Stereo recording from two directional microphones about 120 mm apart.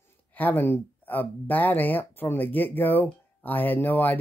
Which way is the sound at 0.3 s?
15° left (ahead or behind).